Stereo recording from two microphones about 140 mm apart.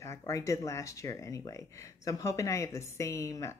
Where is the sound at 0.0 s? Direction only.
20° left (ahead or behind).